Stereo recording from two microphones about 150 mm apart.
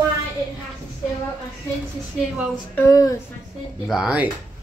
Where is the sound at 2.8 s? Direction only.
20° left (ahead or behind).